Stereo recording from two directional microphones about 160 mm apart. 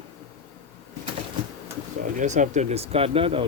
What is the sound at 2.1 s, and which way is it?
Speech, 50° right (ahead or behind).